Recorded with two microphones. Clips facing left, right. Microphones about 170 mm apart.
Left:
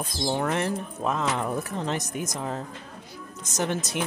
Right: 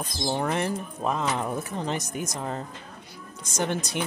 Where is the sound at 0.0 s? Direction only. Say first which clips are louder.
Left 1 dB; centre (ahead or behind).